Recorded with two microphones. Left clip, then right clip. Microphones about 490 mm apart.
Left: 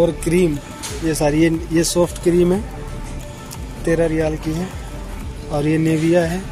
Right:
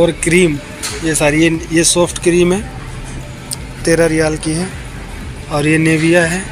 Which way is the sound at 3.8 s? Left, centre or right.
Left.